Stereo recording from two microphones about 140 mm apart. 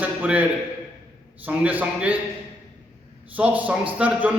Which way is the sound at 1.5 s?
10° right (ahead or behind).